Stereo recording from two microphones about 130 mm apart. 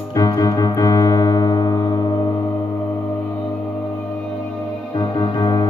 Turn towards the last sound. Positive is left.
turn(degrees=30)  # may be behind; listen again after turning